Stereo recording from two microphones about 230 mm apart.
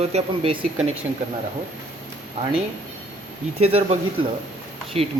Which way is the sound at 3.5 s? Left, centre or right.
Right.